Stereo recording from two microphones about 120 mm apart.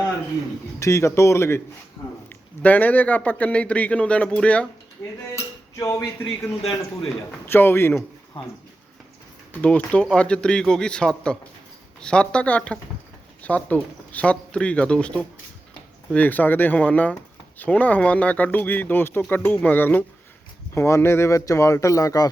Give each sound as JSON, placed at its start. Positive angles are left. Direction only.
{"t": 0.8, "sound": "a man's voice", "side_deg": 25}
{"t": 5.3, "sound": "a sound", "side_deg": 25}
{"t": 7.4, "sound": "speech", "side_deg": 20}
{"t": 9.5, "sound": "a man's voice", "side_deg": 10}